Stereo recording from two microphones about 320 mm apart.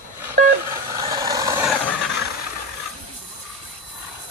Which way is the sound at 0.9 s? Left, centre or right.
Centre.